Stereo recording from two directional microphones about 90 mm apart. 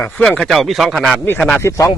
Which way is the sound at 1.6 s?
35° left (ahead or behind).